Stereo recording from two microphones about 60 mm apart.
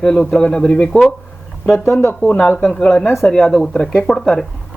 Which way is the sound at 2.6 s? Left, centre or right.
Centre.